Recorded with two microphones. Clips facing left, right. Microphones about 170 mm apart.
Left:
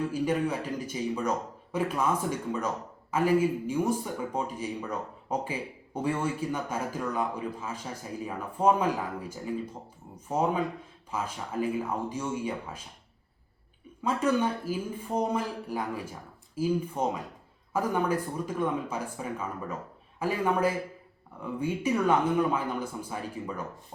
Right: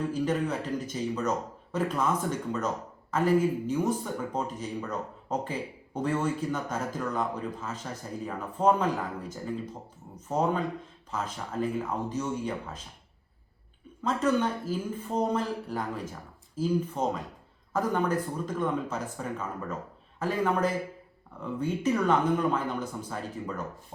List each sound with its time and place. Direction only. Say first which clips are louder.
0.1 s speech: even; 10° left (ahead or behind)
10.2 s speech: even; 10° left (ahead or behind)
14.0 s speech: even; 10° left (ahead or behind)